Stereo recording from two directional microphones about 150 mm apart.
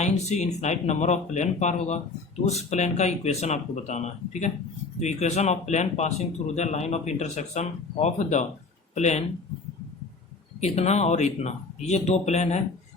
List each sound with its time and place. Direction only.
0.0 s speech: 50° left (ahead or behind)
10.6 s speech: 45° left (ahead or behind)